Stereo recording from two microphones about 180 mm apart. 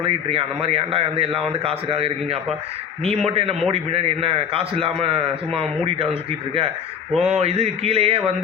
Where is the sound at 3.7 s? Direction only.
30° right (ahead or behind).